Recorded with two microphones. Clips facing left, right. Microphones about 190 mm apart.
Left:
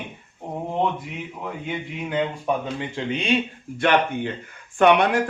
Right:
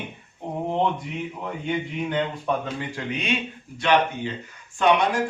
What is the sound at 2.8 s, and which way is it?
Speech, 25° left (ahead or behind).